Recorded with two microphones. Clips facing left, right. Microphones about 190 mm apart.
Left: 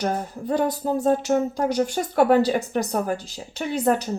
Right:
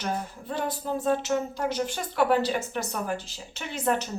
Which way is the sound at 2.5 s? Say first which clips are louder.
Left 6 dB; 35° left (ahead or behind).